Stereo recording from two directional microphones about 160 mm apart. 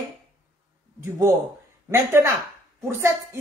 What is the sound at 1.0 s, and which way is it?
A man's voice, 20° right (ahead or behind).